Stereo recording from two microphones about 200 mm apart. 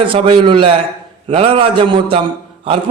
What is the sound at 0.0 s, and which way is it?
A man's voice, 25° right (ahead or behind).